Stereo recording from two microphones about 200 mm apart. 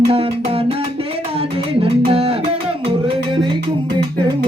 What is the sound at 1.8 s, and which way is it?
Music, 30° right (ahead or behind).